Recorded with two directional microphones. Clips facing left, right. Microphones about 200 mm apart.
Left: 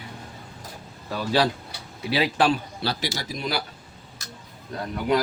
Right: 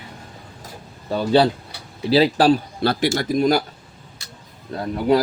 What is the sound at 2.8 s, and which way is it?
Speech, 55° right (ahead or behind).